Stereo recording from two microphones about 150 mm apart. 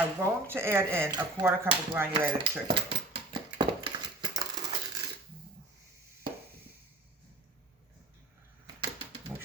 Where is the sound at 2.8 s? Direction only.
35° right (ahead or behind).